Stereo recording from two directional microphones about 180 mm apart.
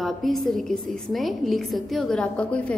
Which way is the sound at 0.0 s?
Centre (ahead or behind).